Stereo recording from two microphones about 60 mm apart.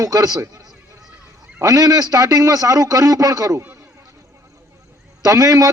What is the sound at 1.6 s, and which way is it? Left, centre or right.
A man's voice, right.